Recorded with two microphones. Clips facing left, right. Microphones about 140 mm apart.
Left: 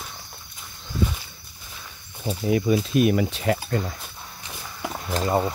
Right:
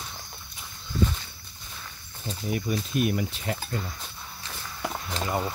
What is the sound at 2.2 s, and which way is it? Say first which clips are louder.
Speech: left 8 dB; 90° left.